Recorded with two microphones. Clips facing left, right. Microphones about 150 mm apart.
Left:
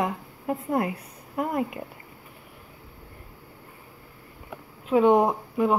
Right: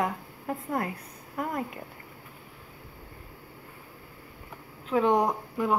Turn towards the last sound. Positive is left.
turn(degrees=25)  # may be behind; listen again after turning